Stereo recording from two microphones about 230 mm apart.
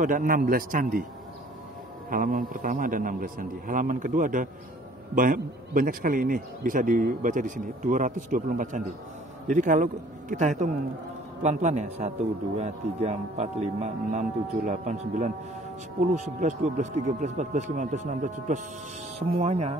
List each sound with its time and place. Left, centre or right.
0.0 s a man's voice: right
2.0 s a man's voice: right
11.4 s a man's voice: right